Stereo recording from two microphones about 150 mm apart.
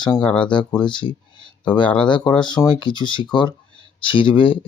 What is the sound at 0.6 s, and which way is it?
Speech, 10° left (ahead or behind).